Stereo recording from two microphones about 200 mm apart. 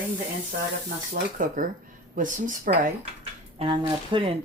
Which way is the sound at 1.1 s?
45° right (ahead or behind).